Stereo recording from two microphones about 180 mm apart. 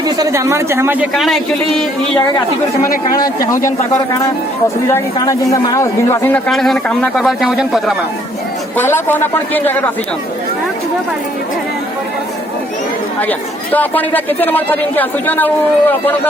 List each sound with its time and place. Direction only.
0.0 s speech: 20° right (ahead or behind)
1.1 s a man's voice: centre (ahead or behind)
2.8 s speech: 50° left (ahead or behind)
3.4 s a man's voice: 15° left (ahead or behind); by 7.9 s centre (ahead or behind)
8.7 s a man's voice: 10° left (ahead or behind)
13.7 s a man's voice: 10° left (ahead or behind)